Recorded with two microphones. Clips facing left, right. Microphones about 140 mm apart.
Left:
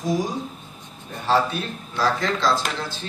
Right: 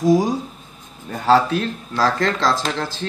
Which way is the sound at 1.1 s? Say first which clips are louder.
Right 5 dB; 90° right.